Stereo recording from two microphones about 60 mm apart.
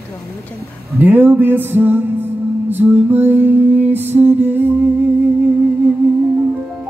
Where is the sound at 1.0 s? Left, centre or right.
Right.